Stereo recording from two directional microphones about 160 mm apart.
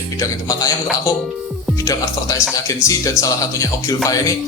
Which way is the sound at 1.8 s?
20° left (ahead or behind).